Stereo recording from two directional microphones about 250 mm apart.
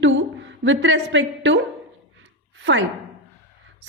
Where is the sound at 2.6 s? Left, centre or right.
Right.